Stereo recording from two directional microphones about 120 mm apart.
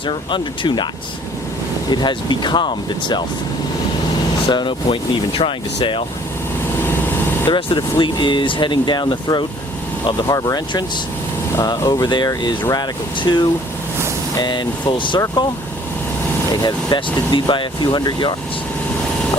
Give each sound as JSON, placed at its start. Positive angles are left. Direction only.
{"t": 0.0, "sound": "speech", "side_deg": 45}
{"t": 1.9, "sound": "speech", "side_deg": 40}
{"t": 4.4, "sound": "speech", "side_deg": 40}
{"t": 6.8, "sound": "vehicle", "side_deg": 20}
{"t": 7.5, "sound": "speech", "side_deg": 40}
{"t": 16.6, "sound": "speech", "side_deg": 40}